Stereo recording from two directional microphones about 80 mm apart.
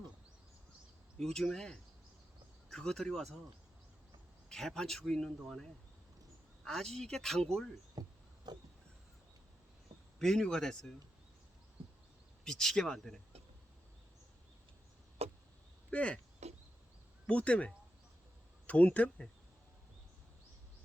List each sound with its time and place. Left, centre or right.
1.2 s speech: centre
4.4 s speech: centre
6.7 s speech: centre
8.0 s speech: right
8.5 s a sound: right
10.2 s speech: centre
12.5 s speech: centre
15.9 s speech: centre
17.2 s speech: centre